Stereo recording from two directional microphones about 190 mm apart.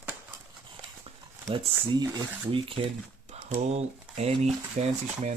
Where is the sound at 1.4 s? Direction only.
25° right (ahead or behind).